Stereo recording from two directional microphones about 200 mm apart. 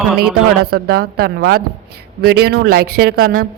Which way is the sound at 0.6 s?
50° right (ahead or behind).